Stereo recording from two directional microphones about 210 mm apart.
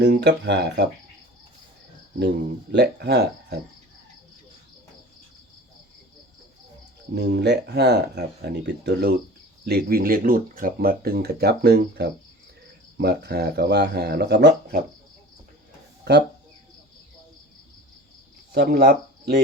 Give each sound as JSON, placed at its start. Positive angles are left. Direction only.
{"t": 0.0, "sound": "speech", "side_deg": -55}
{"t": 2.7, "sound": "speech", "side_deg": -55}
{"t": 7.2, "sound": "speech", "side_deg": -50}
{"t": 18.5, "sound": "speech", "side_deg": -45}